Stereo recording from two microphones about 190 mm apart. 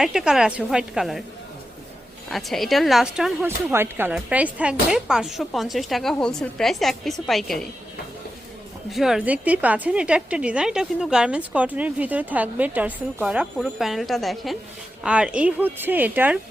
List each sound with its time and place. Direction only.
0.0 s a woman's voice: centre (ahead or behind)
2.3 s a woman's voice: centre (ahead or behind)
8.9 s a woman's voice: centre (ahead or behind)